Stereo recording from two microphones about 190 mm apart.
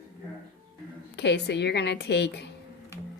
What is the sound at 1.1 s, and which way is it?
A woman's voice, 65° left (ahead or behind).